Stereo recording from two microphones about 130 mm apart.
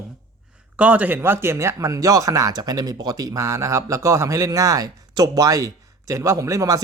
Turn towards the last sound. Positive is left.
turn(degrees=-25)  # may be behind; listen again after turning